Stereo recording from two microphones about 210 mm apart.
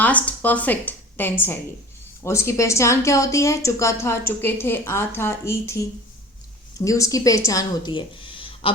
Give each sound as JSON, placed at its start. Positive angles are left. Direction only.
{"t": 0.0, "sound": "a woman's voice", "side_deg": 5}